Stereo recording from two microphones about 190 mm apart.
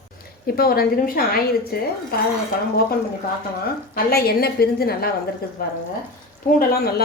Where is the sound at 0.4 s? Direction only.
55° left (ahead or behind).